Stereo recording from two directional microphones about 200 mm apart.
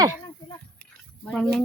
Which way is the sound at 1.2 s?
5° left (ahead or behind).